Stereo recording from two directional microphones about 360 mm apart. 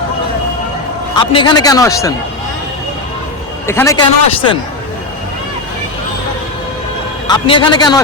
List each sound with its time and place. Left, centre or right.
1.1 s a man's voice: centre
3.7 s a man's voice: centre
7.3 s a man's voice: centre